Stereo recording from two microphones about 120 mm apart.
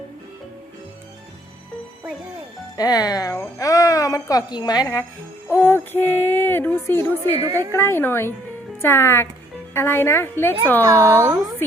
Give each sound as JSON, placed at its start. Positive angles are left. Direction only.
{"t": 2.7, "sound": "a woman's voice", "side_deg": 35}
{"t": 5.7, "sound": "speech", "side_deg": 15}
{"t": 7.4, "sound": "speech", "side_deg": -30}
{"t": 7.7, "sound": "a woman's voice", "side_deg": 20}
{"t": 10.8, "sound": "speech", "side_deg": -25}